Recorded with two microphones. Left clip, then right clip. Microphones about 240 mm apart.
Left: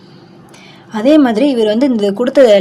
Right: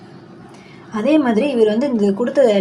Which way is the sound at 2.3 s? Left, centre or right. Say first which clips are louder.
Left 7 dB; left.